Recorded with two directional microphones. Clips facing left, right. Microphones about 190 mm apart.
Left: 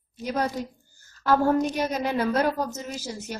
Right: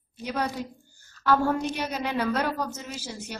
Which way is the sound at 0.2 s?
45° left (ahead or behind).